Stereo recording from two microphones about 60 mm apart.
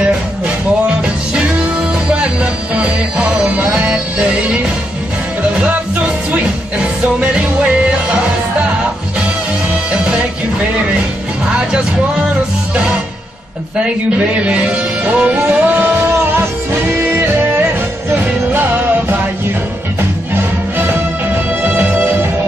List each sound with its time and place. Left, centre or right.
1.3 s music: centre
14.3 s music: right
21.6 s music: right